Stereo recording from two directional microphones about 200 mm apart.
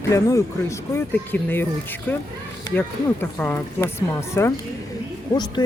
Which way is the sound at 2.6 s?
10° left (ahead or behind).